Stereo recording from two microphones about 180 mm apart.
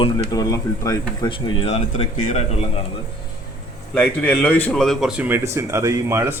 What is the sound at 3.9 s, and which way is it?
Speech, 5° left (ahead or behind).